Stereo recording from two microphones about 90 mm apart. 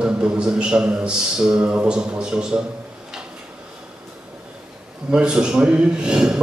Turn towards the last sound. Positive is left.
turn(degrees=-10)  # may be behind; listen again after turning